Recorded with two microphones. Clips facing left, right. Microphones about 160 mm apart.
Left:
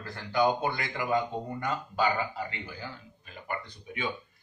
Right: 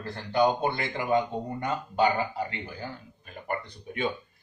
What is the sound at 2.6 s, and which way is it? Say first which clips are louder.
Speech: right 3 dB; 50° right (ahead or behind).